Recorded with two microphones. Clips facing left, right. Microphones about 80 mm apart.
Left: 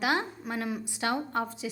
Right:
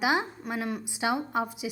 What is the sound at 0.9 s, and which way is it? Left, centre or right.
Speech, centre.